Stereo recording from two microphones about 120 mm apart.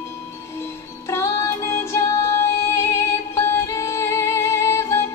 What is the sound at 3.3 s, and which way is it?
Music, 25° left (ahead or behind).